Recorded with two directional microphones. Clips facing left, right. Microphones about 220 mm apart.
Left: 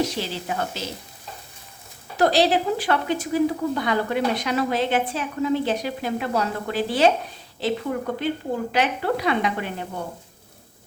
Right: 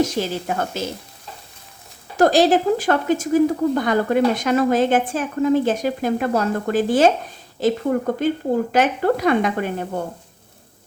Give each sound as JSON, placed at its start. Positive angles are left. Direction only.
{"t": 0.0, "sound": "speech", "side_deg": -45}
{"t": 2.1, "sound": "speech", "side_deg": -45}